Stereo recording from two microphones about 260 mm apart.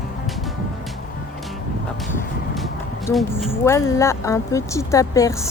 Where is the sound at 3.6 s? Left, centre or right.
Centre.